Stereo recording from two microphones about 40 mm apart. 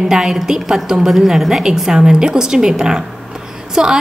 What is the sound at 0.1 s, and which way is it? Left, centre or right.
A woman's voice, centre.